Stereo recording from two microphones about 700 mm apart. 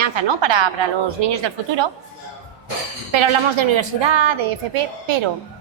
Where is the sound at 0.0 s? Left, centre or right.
Right.